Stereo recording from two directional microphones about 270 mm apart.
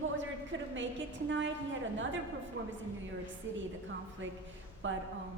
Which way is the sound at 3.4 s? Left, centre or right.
Right.